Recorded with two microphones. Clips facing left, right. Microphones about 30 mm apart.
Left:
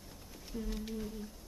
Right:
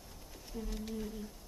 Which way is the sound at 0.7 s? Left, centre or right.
Centre.